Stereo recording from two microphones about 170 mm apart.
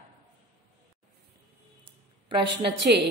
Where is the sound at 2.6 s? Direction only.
90° right.